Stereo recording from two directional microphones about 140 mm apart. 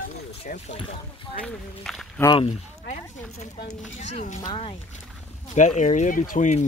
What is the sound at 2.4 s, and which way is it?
Speech, 55° left (ahead or behind).